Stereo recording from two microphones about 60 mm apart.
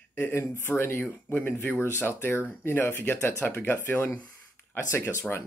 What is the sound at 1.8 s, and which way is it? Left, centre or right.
Speech, left.